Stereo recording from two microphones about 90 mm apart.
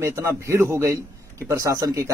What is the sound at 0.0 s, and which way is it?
A man's voice, 30° right (ahead or behind).